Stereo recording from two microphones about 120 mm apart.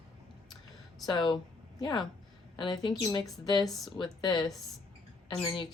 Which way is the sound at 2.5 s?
40° left (ahead or behind).